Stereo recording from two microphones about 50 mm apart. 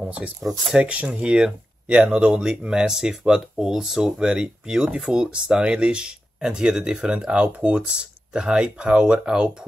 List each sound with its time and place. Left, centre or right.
0.0 s speech: right
0.4 s speech: centre
0.7 s speech: right
7.3 s speech: right
7.9 s speech: centre